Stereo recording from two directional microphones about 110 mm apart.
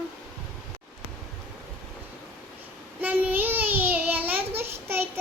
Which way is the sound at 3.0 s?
15° right (ahead or behind).